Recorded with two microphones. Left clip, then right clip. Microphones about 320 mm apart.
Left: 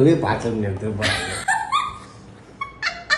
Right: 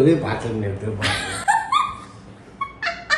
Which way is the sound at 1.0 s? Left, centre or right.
Centre.